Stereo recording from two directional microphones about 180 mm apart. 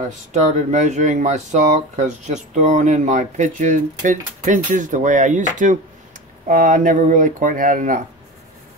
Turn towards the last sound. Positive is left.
turn(degrees=-45)  # may be behind; listen again after turning